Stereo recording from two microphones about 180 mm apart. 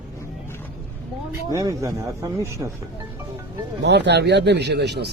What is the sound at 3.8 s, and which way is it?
A man's voice, 70° right (ahead or behind).